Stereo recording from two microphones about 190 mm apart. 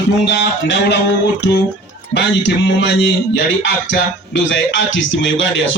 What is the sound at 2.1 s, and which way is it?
Music, 65° left (ahead or behind).